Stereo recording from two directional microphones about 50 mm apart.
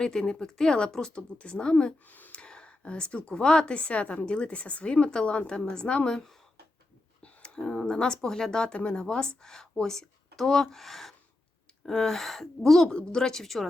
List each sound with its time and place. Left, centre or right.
0.0 s speech: centre
1.1 s a woman's voice: left
2.0 s speech: left
2.3 s a woman's voice: centre
12.9 s speech: centre